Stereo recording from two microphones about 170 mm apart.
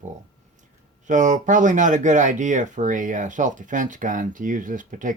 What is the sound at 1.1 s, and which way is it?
Speech, 45° right (ahead or behind).